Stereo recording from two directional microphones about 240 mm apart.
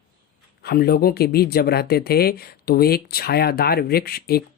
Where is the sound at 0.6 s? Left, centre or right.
Left.